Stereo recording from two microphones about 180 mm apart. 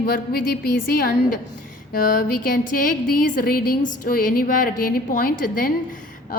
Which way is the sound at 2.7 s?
50° left (ahead or behind).